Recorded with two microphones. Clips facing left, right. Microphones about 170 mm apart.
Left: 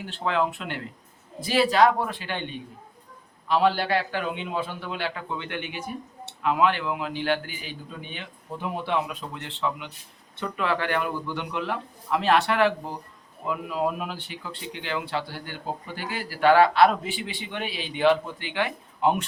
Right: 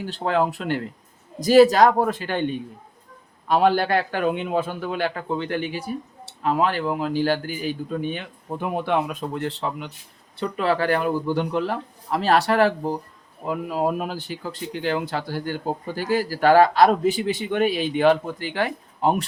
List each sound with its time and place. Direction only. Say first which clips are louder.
0.0 s a man's voice: right 4 dB; 40° right (ahead or behind)